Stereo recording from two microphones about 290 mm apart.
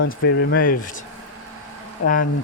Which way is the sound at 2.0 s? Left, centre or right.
Left.